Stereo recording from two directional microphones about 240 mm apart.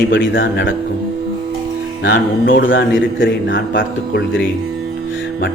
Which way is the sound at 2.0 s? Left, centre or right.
Left.